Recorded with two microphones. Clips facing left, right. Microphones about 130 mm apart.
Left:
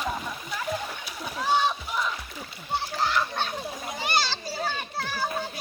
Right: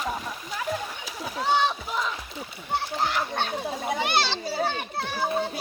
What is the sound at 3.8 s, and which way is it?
Children playing, 65° right (ahead or behind).